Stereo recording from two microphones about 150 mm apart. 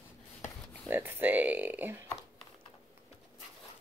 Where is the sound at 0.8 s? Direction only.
15° right (ahead or behind).